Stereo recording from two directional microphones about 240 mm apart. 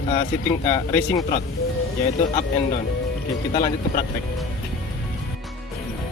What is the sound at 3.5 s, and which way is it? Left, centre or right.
Speech, left.